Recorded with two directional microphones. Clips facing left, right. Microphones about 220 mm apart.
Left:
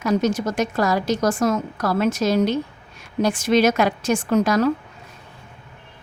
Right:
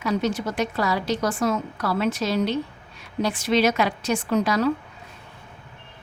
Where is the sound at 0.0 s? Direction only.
45° left (ahead or behind).